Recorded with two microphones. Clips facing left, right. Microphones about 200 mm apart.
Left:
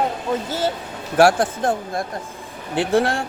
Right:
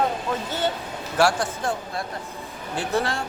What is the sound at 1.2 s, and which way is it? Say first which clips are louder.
Speech: left 6 dB; 55° left (ahead or behind).